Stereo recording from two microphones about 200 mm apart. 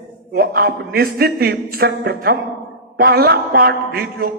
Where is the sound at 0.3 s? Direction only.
50° right (ahead or behind).